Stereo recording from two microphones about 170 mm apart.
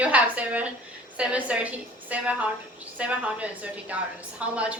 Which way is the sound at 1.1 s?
10° right (ahead or behind).